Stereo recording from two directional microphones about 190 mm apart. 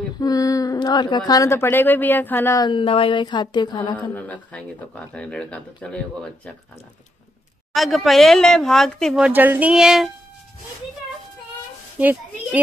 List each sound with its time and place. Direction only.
0.2 s speech: 20° left (ahead or behind)
4.1 s speech: 5° left (ahead or behind)
7.7 s a woman's voice: centre (ahead or behind)
12.0 s a child's voice: 5° right (ahead or behind)